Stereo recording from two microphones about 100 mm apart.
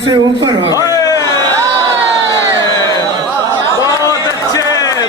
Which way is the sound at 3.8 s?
35° left (ahead or behind).